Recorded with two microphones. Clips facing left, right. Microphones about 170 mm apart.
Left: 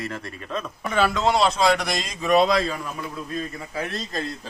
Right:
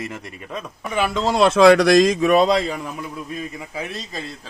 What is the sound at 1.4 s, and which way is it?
Speech, 75° right (ahead or behind).